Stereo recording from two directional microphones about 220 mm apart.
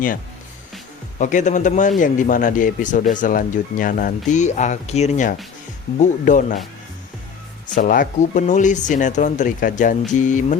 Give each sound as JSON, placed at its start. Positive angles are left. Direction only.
{"t": 1.2, "sound": "speech", "side_deg": 35}
{"t": 7.7, "sound": "speech", "side_deg": 40}